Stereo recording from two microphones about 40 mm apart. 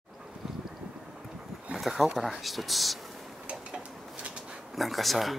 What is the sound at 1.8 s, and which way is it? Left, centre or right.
Speech, centre.